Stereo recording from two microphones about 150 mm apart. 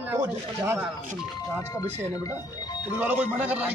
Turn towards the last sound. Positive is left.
turn(degrees=-10)  # may be behind; listen again after turning